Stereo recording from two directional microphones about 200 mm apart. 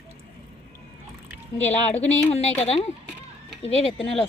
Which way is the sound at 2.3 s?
30° left (ahead or behind).